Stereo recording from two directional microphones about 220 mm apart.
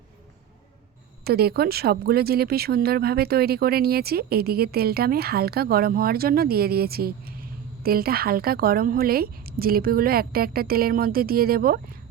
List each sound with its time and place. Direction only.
1.2 s speech: 45° right (ahead or behind)